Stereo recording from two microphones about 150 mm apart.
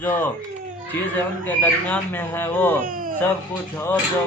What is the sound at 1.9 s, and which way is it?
Speech, 15° left (ahead or behind).